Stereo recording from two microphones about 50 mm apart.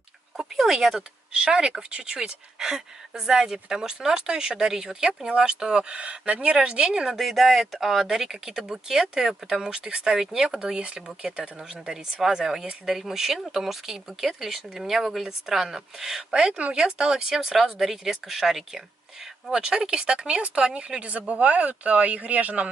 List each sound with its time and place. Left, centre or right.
0.4 s speech: centre
7.2 s speech: centre
19.5 s speech: centre